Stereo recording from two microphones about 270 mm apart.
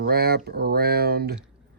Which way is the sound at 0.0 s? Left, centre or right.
Right.